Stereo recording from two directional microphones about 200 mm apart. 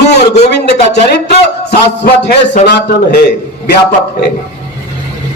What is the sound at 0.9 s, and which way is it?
A man's voice, 55° left (ahead or behind).